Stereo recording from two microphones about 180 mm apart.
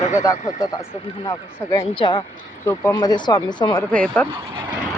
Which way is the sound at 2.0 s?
30° left (ahead or behind).